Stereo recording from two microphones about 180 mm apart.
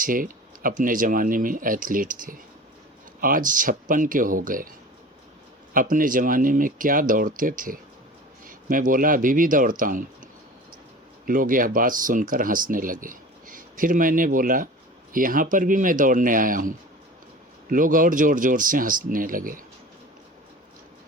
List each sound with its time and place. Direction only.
0.0 s speech: 50° right (ahead or behind)
5.7 s speech: 50° right (ahead or behind)
11.3 s speech: 50° right (ahead or behind)